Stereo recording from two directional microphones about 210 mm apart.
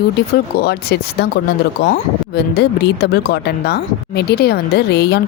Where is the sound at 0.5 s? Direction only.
50° left (ahead or behind).